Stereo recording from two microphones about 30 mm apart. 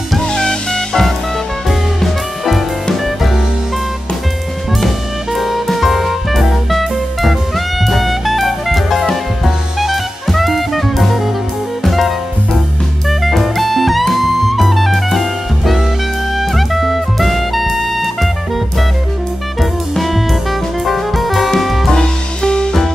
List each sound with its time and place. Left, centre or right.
0.2 s music: left
1.7 s music: centre
4.8 s music: centre
10.2 s jazz: centre
11.8 s music: centre
13.2 s music: centre
19.6 s music: centre
21.9 s music: left